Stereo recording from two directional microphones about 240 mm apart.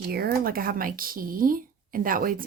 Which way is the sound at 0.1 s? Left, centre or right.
Right.